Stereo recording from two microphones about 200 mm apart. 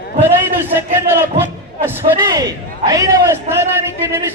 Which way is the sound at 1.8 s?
20° right (ahead or behind).